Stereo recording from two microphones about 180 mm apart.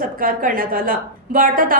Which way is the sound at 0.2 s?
50° right (ahead or behind).